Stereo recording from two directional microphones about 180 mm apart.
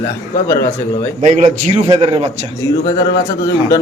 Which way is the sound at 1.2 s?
40° right (ahead or behind).